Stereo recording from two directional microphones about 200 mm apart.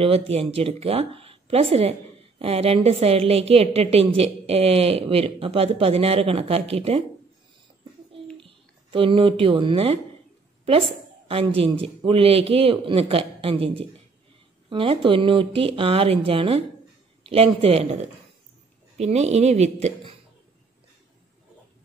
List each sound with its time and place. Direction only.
0.0 s speech: 30° right (ahead or behind)
8.9 s a woman's voice: 25° right (ahead or behind)